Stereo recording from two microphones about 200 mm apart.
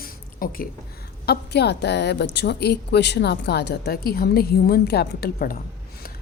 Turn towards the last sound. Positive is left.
turn(degrees=50)  # may be behind; listen again after turning